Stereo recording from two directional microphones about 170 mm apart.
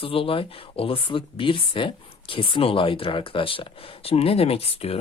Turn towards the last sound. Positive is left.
turn(degrees=35)  # may be behind; listen again after turning